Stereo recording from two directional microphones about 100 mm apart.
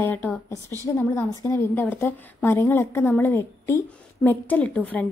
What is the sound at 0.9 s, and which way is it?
A woman's voice, 25° left (ahead or behind).